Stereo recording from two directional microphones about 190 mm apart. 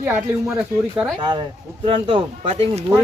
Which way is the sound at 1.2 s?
25° right (ahead or behind).